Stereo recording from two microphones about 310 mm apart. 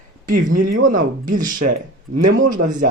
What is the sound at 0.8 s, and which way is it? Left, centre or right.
Speech, right.